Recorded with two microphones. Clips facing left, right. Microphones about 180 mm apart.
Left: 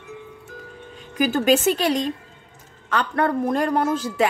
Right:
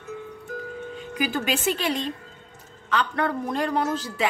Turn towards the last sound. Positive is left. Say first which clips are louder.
# left 4 dB
turn(degrees=50)  # may be behind; listen again after turning